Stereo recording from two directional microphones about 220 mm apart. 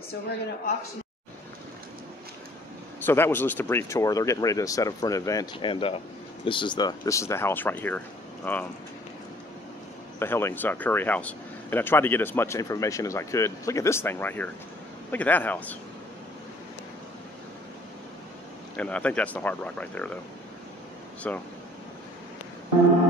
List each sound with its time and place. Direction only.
3.1 s speech: 10° left (ahead or behind)
10.1 s speech: 10° left (ahead or behind)
18.8 s speech: 5° left (ahead or behind)
21.2 s speech: 5° left (ahead or behind)